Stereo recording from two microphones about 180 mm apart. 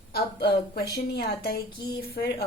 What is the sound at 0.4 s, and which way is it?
Speech, 65° left (ahead or behind).